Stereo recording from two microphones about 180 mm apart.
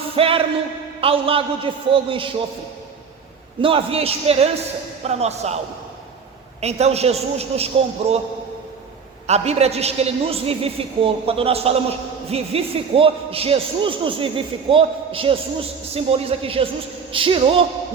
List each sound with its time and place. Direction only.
0.2 s a woman's voice: 30° right (ahead or behind)
3.6 s a woman's voice: 30° right (ahead or behind)
6.6 s a woman's voice: 35° right (ahead or behind)
9.2 s a woman's voice: 35° right (ahead or behind)